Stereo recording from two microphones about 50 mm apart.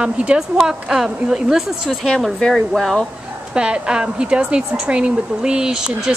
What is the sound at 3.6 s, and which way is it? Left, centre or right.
Speech, centre.